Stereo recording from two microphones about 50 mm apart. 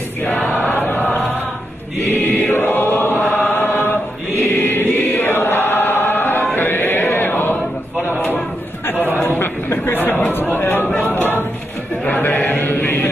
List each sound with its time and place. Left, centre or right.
0.2 s choir: left
2.0 s chant: left
4.6 s choir: left
9.2 s a sound: left
10.0 s chatter: left
11.0 s a sound: left
12.0 s chant: left